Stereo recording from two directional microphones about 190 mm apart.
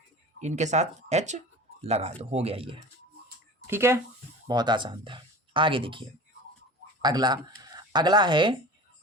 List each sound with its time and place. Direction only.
0.3 s speech: 40° right (ahead or behind)
3.7 s speech: 15° right (ahead or behind)